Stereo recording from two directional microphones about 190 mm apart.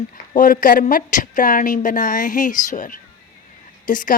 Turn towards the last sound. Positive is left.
turn(degrees=45)  # may be behind; listen again after turning